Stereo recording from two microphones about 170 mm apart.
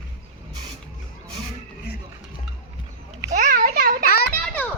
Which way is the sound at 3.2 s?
50° right (ahead or behind).